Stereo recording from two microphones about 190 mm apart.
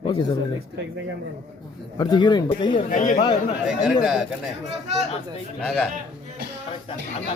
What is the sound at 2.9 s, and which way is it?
Speech, 40° left (ahead or behind).